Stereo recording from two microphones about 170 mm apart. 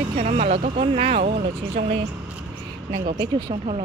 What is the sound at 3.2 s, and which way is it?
Speech, 25° right (ahead or behind).